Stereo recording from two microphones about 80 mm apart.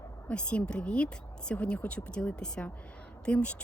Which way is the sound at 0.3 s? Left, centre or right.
Centre.